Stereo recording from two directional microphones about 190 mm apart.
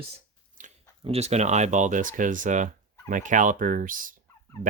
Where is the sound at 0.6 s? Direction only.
45° right (ahead or behind).